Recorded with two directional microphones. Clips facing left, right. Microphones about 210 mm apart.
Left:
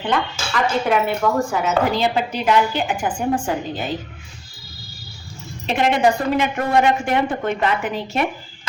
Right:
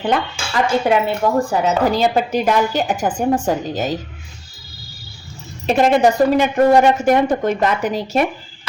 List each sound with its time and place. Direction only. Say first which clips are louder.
0.5 s a woman's voice: right 3 dB; 30° right (ahead or behind)
5.6 s a woman's voice: right 4 dB; 40° right (ahead or behind)